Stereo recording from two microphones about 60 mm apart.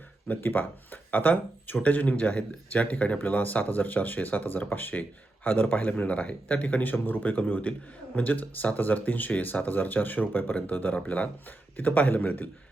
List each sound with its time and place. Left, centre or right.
0.3 s speech: left